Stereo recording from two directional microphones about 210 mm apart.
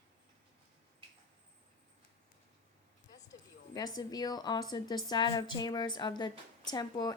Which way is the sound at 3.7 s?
20° left (ahead or behind).